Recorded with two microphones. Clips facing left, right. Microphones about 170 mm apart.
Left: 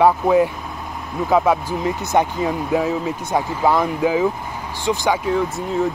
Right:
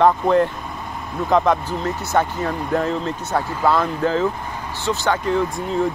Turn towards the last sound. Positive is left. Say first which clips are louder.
# even
turn(degrees=5)  # may be behind; listen again after turning